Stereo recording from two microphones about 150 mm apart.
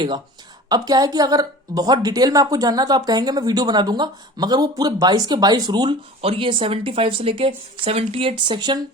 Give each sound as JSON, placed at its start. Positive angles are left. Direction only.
{"t": 0.7, "sound": "a woman's voice", "side_deg": -25}